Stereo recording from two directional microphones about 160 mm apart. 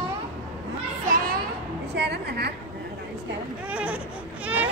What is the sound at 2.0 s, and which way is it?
Speech, 90° right.